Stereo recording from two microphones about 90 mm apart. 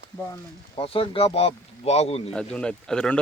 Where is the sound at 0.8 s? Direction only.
90° left.